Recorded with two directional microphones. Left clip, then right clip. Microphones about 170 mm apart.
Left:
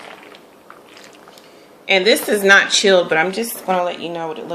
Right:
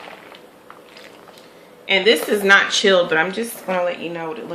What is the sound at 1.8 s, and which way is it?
Speech, 35° left (ahead or behind).